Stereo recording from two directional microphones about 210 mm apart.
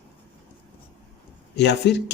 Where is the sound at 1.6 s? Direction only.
55° left (ahead or behind).